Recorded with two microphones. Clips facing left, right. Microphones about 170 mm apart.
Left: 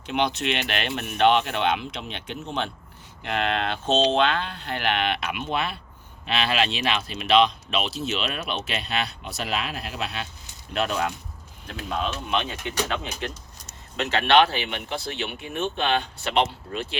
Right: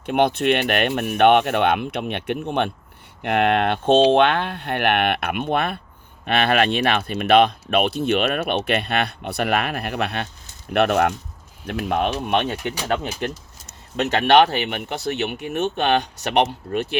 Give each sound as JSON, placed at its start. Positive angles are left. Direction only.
{"t": 0.0, "sound": "speech", "side_deg": -55}
{"t": 14.8, "sound": "speech", "side_deg": -60}
{"t": 16.4, "sound": "speech", "side_deg": -55}